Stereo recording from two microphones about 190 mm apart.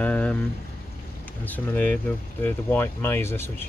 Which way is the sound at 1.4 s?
10° left (ahead or behind).